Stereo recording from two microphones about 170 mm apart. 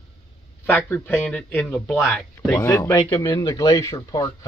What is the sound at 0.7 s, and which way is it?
Speech, 10° left (ahead or behind).